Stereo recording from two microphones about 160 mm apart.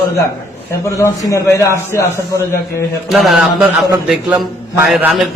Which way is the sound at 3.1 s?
Centre (ahead or behind).